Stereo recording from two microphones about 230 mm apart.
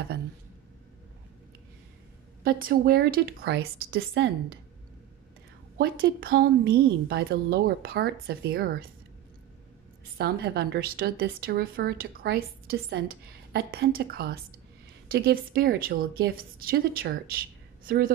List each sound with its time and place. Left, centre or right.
2.4 s speech: right
5.8 s a woman's voice: right
10.1 s speech: right